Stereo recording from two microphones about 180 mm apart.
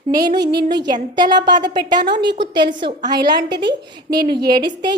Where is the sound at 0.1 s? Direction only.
20° right (ahead or behind).